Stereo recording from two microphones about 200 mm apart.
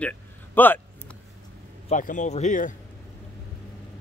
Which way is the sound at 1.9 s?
40° left (ahead or behind).